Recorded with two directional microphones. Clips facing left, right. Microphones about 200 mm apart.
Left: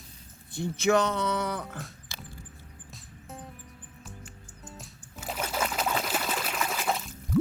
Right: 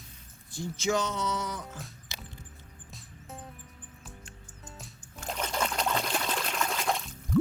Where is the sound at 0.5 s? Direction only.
60° left (ahead or behind).